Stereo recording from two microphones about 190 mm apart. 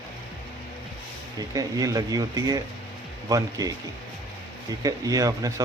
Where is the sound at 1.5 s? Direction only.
20° right (ahead or behind).